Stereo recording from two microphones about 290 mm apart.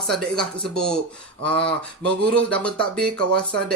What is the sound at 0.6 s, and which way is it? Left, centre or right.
Speech, centre.